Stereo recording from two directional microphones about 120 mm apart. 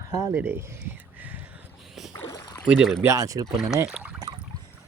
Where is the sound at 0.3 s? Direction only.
20° right (ahead or behind).